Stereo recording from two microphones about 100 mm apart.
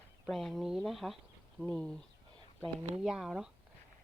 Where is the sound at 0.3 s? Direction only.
Centre (ahead or behind).